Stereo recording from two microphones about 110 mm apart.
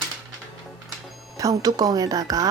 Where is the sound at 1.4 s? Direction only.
35° right (ahead or behind).